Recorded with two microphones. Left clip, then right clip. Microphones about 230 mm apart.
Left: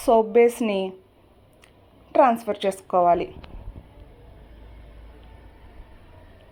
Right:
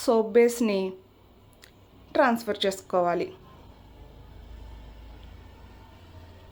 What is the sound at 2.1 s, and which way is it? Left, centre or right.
Speech, centre.